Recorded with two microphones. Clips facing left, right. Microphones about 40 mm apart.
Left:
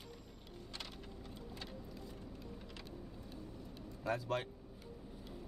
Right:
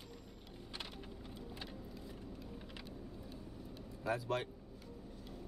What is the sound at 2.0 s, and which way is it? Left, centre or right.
Vehicle, centre.